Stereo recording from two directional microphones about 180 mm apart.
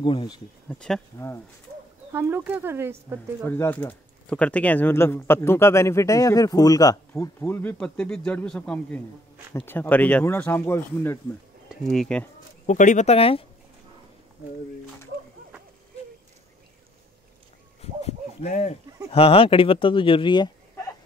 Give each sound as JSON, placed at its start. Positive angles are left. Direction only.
{"t": 0.0, "sound": "speech", "side_deg": 25}
{"t": 0.7, "sound": "speech", "side_deg": 5}
{"t": 2.1, "sound": "speech", "side_deg": -10}
{"t": 3.4, "sound": "speech", "side_deg": 10}
{"t": 11.7, "sound": "speech", "side_deg": 0}
{"t": 12.6, "sound": "speech", "side_deg": 45}
{"t": 18.0, "sound": "a sound", "side_deg": 40}
{"t": 19.1, "sound": "speech", "side_deg": 30}